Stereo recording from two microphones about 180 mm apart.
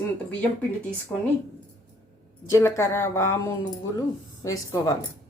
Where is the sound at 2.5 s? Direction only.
15° left (ahead or behind).